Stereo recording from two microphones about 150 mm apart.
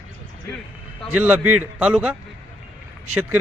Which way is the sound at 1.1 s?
10° right (ahead or behind).